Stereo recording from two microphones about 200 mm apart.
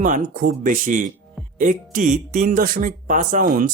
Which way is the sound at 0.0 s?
45° right (ahead or behind).